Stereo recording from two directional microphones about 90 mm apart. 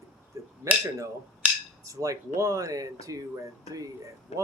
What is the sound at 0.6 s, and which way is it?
Speech, 35° right (ahead or behind).